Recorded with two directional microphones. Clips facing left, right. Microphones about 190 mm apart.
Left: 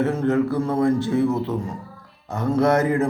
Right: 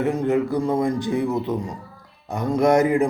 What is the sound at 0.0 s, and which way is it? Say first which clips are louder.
A man's voice: left 1 dB; 15° right (ahead or behind).